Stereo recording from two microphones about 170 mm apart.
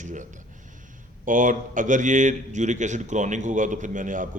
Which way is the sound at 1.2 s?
50° right (ahead or behind).